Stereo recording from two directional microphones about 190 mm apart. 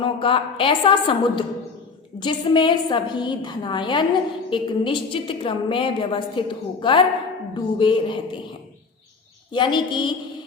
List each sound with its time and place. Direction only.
0.0 s a woman's voice: 30° left (ahead or behind)
9.5 s a woman's voice: 25° left (ahead or behind)